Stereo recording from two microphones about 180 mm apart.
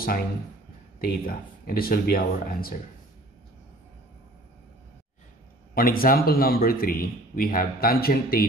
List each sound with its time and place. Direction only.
1.0 s speech: 55° left (ahead or behind)
5.8 s speech: 50° left (ahead or behind)